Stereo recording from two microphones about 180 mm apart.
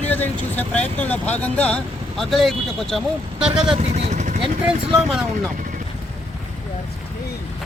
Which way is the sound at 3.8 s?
35° right (ahead or behind).